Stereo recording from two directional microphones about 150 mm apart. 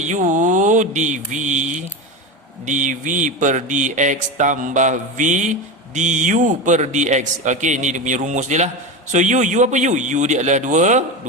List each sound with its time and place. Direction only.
0.0 s speech: 55° right (ahead or behind)